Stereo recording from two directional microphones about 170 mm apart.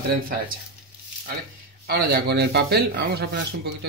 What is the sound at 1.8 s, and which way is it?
Speech, 65° right (ahead or behind).